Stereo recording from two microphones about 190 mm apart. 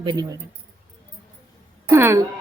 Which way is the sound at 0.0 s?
20° right (ahead or behind).